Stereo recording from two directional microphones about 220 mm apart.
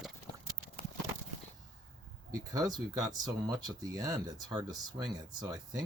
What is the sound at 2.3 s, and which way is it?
Speech, 15° right (ahead or behind).